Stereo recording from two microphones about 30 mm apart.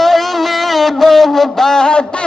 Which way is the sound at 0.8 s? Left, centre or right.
Centre.